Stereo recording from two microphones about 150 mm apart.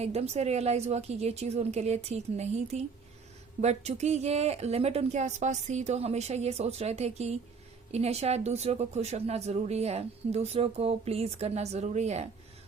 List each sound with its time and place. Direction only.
0.0 s speech: 45° right (ahead or behind)